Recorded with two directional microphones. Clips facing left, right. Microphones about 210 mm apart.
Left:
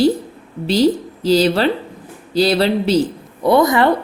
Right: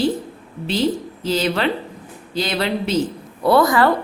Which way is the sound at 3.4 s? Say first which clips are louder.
Left 2 dB; 20° left (ahead or behind).